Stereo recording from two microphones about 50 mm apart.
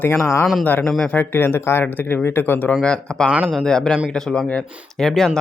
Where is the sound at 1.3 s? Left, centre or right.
Left.